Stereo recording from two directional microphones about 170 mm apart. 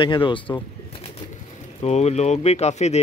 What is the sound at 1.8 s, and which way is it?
Speech, 40° left (ahead or behind).